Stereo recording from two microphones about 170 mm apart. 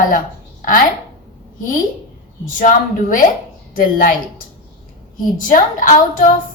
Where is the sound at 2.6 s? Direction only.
50° left (ahead or behind).